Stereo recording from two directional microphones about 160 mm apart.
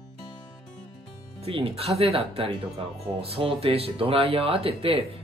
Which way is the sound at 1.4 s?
35° right (ahead or behind).